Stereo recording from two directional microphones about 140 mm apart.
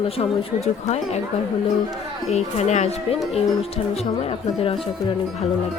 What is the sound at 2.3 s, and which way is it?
Speech, 55° left (ahead or behind).